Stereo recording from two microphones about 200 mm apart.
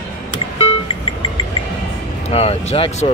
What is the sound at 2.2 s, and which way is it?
Speech, 30° left (ahead or behind).